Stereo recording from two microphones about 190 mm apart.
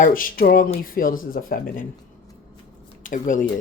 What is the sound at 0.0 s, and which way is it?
Speech, 45° left (ahead or behind).